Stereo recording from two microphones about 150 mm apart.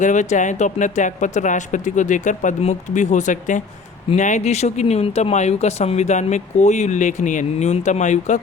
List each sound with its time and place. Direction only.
0.0 s speech: 55° left (ahead or behind)